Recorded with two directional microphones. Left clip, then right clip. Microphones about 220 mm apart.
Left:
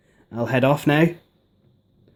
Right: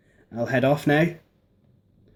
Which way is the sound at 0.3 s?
40° left (ahead or behind).